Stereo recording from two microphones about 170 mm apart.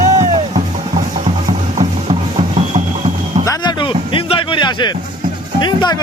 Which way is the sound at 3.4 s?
20° left (ahead or behind).